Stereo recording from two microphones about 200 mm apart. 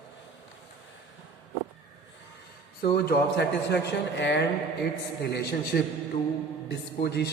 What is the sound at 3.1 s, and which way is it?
A man's voice, 55° left (ahead or behind).